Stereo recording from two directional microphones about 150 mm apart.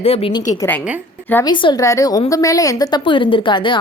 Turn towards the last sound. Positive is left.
turn(degrees=35)  # may be behind; listen again after turning